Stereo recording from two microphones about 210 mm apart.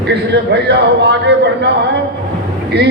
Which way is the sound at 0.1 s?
55° right (ahead or behind).